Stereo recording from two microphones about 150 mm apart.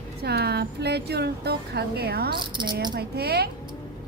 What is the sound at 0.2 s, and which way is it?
Speech, 90° right.